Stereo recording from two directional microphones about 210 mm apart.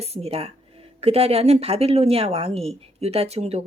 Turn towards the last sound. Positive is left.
turn(degrees=-30)  # may be behind; listen again after turning